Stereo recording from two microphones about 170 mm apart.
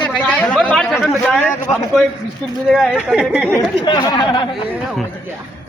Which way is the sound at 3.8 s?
25° left (ahead or behind).